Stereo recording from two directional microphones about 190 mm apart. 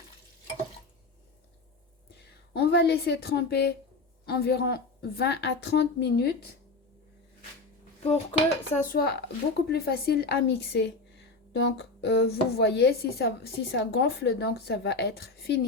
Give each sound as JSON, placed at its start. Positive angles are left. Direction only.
{"t": 2.5, "sound": "a woman's voice", "side_deg": 60}
{"t": 8.0, "sound": "speech", "side_deg": 30}